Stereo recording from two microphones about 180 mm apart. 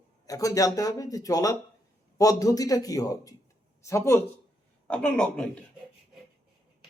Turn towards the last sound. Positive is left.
turn(degrees=5)  # may be behind; listen again after turning